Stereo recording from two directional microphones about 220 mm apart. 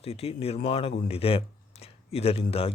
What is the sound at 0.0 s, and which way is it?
Speech, 25° left (ahead or behind).